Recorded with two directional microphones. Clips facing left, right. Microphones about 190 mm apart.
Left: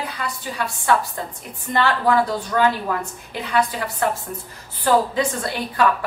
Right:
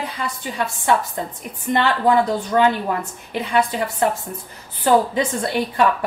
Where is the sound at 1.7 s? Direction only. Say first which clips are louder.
Right 2 dB; 20° right (ahead or behind).